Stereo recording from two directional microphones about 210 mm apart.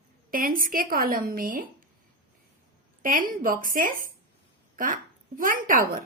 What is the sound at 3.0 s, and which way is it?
Speech, 40° right (ahead or behind).